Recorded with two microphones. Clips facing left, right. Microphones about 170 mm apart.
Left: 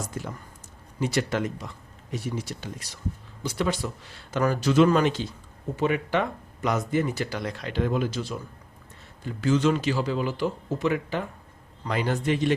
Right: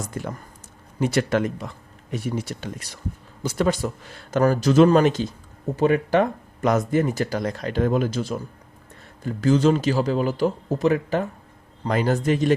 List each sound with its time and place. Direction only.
0.1 s speech: 55° right (ahead or behind)
3.4 s speech: 45° right (ahead or behind)